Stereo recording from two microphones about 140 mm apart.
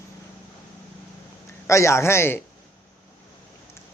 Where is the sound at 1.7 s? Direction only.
20° left (ahead or behind).